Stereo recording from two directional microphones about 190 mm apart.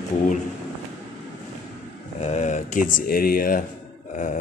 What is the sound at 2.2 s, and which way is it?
Speech, 35° left (ahead or behind).